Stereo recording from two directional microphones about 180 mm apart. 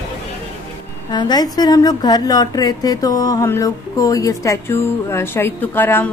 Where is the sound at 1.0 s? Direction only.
25° left (ahead or behind).